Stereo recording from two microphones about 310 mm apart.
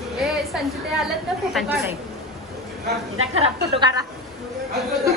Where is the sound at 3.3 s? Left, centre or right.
Centre.